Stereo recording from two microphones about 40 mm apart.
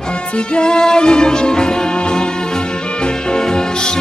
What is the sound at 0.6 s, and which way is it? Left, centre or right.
Music, centre.